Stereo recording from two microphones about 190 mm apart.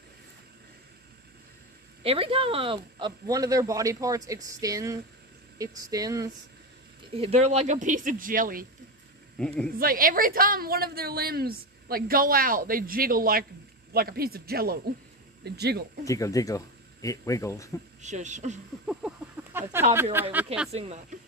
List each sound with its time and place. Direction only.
2.0 s speech: 30° right (ahead or behind)
7.2 s a woman's voice: 35° right (ahead or behind)
9.4 s speech: 5° left (ahead or behind)
9.8 s a woman's voice: 50° right (ahead or behind)
16.0 s speech: 15° left (ahead or behind)
18.0 s speech: 40° right (ahead or behind)
18.9 s a sound: 10° right (ahead or behind)
19.9 s speech: 10° right (ahead or behind)
20.7 s speech: 35° right (ahead or behind)